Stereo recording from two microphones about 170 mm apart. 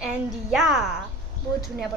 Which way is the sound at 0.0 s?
5° right (ahead or behind).